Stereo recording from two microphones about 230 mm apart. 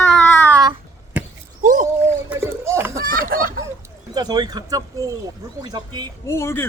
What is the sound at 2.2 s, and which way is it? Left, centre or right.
Speech, centre.